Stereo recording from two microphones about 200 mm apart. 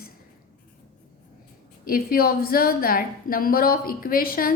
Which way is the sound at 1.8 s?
45° left (ahead or behind).